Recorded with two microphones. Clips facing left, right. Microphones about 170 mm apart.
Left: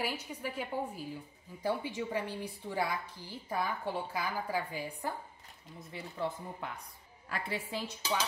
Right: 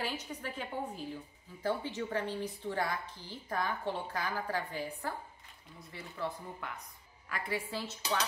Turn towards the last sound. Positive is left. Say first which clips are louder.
# right 1 dB
turn(degrees=20)  # may be behind; listen again after turning